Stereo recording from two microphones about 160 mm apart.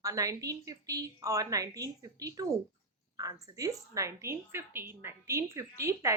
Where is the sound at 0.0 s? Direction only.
20° right (ahead or behind).